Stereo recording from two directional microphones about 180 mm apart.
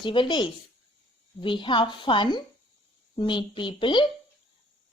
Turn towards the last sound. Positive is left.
turn(degrees=25)  # may be behind; listen again after turning